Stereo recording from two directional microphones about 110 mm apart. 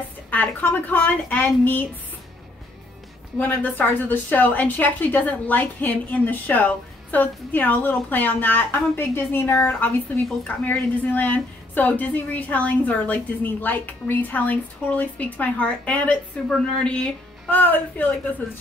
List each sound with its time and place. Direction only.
0.3 s a woman's voice: 15° left (ahead or behind)
3.3 s a woman's voice: 15° left (ahead or behind)